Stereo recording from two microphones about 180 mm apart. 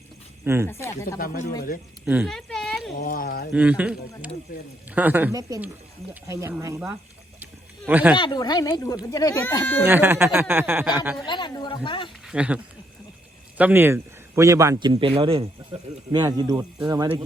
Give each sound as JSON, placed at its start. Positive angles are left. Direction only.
{"t": 0.4, "sound": "speech", "side_deg": -15}
{"t": 0.7, "sound": "speech", "side_deg": 15}
{"t": 1.2, "sound": "speech", "side_deg": 55}
{"t": 2.0, "sound": "speech", "side_deg": -10}
{"t": 2.3, "sound": "a sound", "side_deg": 0}
{"t": 3.0, "sound": "speech", "side_deg": 55}
{"t": 3.5, "sound": "speech", "side_deg": -5}
{"t": 8.1, "sound": "speech", "side_deg": 25}
{"t": 9.8, "sound": "speech", "side_deg": -10}
{"t": 11.3, "sound": "speech", "side_deg": 25}
{"t": 12.2, "sound": "speech", "side_deg": -5}
{"t": 13.6, "sound": "a man's voice", "side_deg": -10}